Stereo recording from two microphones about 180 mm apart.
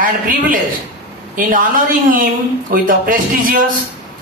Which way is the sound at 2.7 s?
50° right (ahead or behind).